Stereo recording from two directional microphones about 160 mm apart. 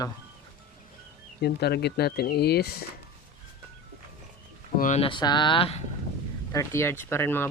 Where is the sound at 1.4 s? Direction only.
90° left.